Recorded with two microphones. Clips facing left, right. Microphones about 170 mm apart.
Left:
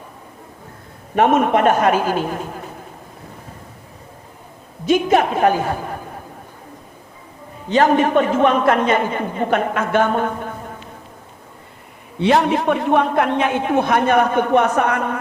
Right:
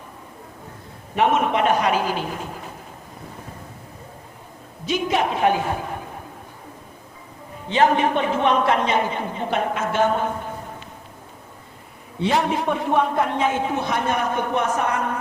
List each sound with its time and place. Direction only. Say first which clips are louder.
1.1 s a woman's voice: left 5 dB; 50° left (ahead or behind)
4.9 s a woman's voice: left 6 dB; 50° left (ahead or behind)
7.7 s a woman's voice: left 4 dB; 45° left (ahead or behind)
12.2 s a man's voice: left 5 dB; 70° left (ahead or behind)